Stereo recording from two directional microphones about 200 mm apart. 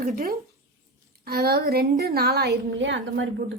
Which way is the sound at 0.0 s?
45° right (ahead or behind).